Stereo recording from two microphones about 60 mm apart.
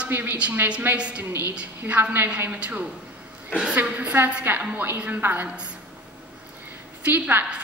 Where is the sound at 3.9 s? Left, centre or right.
Right.